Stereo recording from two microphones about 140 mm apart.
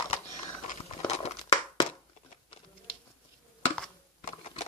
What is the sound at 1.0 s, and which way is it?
Crumpling, 50° left (ahead or behind).